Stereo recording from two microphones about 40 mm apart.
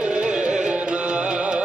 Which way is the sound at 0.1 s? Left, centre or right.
Right.